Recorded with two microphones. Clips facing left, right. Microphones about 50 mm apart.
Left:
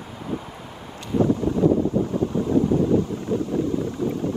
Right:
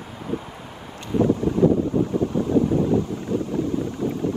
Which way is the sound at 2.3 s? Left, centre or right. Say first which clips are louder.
Left 2 dB; right.